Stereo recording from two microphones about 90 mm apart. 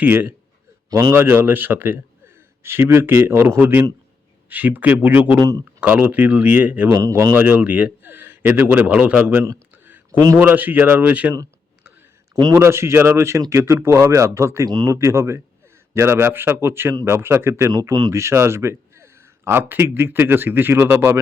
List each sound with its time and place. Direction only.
0.0 s a man's voice: 20° right (ahead or behind)
0.9 s a man's voice: 45° right (ahead or behind)
1.1 s a man's voice: 25° right (ahead or behind)
5.4 s speech: 50° right (ahead or behind)
5.8 s speech: 15° right (ahead or behind)
6.8 s speech: 35° right (ahead or behind)
7.3 s a man's voice: 20° right (ahead or behind)
9.4 s a sound: 25° right (ahead or behind)
10.3 s a man's voice: 20° right (ahead or behind)
12.5 s a man's voice: 30° right (ahead or behind)
14.7 s speech: 50° right (ahead or behind)
14.9 s a man's voice: 30° right (ahead or behind)
17.7 s speech: 45° right (ahead or behind)
18.1 s speech: 30° right (ahead or behind)